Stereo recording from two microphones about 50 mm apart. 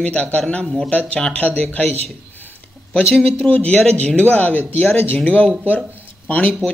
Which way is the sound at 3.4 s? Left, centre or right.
Left.